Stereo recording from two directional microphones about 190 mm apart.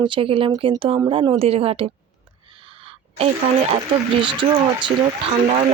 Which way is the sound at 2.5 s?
30° right (ahead or behind).